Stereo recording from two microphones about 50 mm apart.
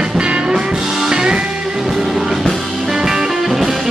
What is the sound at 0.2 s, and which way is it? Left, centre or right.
Music, centre.